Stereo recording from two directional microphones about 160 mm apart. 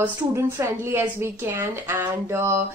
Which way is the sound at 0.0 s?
15° right (ahead or behind).